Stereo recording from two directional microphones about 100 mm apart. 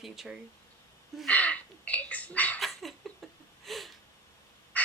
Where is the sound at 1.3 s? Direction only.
15° left (ahead or behind).